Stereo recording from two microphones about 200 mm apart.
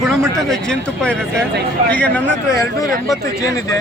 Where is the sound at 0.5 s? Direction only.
5° left (ahead or behind).